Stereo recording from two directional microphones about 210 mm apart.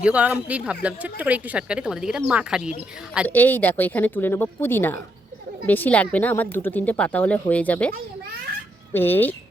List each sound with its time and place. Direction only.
0.0 s speech: 5° right (ahead or behind)
3.2 s speech: 10° left (ahead or behind)